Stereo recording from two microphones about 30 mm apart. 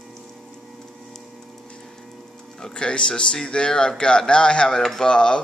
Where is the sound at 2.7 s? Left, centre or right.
Left.